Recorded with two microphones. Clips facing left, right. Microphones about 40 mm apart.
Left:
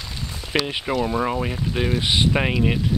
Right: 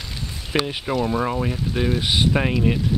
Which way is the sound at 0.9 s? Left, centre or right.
Centre.